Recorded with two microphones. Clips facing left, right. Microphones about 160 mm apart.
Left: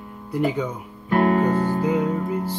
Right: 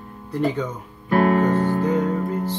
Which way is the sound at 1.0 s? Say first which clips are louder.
Right 1 dB; 40° right (ahead or behind).